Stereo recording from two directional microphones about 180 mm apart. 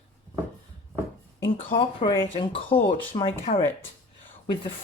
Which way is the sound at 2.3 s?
30° left (ahead or behind).